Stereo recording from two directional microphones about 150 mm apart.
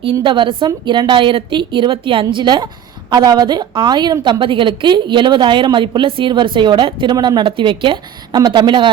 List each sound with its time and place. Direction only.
0.0 s a woman's voice: 35° right (ahead or behind)